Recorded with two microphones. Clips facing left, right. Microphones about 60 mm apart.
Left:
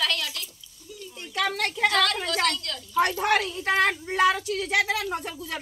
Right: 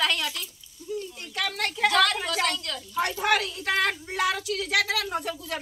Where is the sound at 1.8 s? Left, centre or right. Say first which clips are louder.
Right 1 dB; centre.